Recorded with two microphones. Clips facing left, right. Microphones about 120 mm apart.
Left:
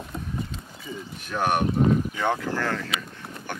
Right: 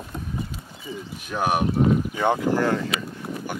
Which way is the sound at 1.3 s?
5° right (ahead or behind).